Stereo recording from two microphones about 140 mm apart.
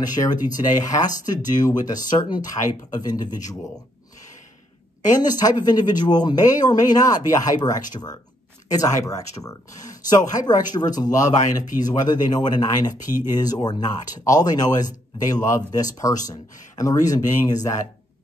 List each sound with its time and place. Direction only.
0.0 s speech: 30° left (ahead or behind)
5.1 s speech: 25° left (ahead or behind)